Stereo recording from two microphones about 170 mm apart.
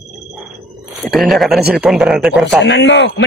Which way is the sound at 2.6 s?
90° left.